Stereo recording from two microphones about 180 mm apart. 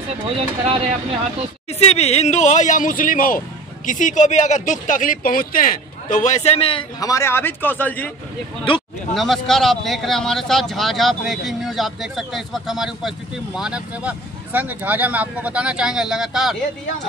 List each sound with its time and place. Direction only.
0.4 s speech: 30° right (ahead or behind)
1.7 s speech: 35° left (ahead or behind); by 8.1 s 10° left (ahead or behind)
9.1 s speech: centre (ahead or behind)